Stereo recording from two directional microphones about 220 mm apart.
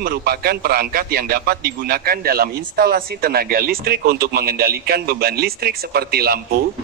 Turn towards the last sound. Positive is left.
turn(degrees=-45)  # may be behind; listen again after turning